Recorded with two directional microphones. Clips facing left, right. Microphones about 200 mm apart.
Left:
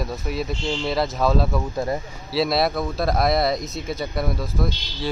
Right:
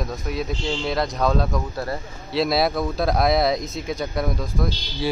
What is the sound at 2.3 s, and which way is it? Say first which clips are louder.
Speech: even; centre (ahead or behind).